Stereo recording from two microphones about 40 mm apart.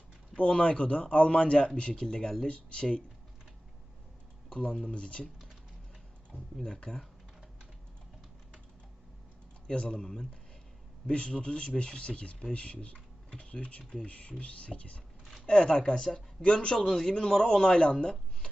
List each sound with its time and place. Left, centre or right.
0.3 s a man's voice: left
4.5 s a man's voice: left
6.3 s a sound: right
6.7 s a man's voice: centre
9.6 s a man's voice: left
15.2 s a sound: centre
15.4 s a man's voice: left